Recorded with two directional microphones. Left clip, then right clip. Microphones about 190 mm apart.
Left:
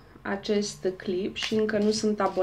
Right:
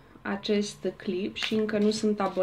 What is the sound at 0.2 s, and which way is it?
Speech, 40° right (ahead or behind).